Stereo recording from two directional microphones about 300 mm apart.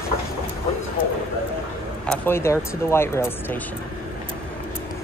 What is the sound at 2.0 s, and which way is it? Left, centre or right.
Speech, centre.